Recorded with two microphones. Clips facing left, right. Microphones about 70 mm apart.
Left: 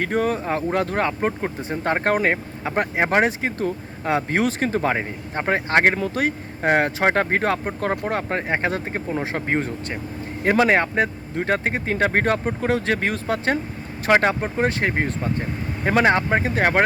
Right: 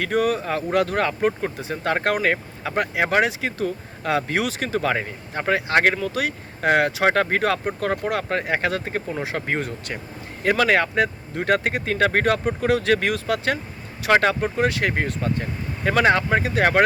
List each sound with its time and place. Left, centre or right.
0.0 s speech: left